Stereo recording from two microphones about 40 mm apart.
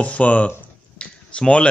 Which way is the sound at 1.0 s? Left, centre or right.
Left.